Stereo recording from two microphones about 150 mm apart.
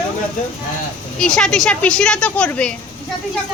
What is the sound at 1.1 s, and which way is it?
Speech, 5° left (ahead or behind).